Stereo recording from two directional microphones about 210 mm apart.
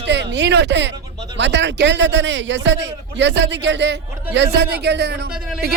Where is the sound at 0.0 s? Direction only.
60° right (ahead or behind).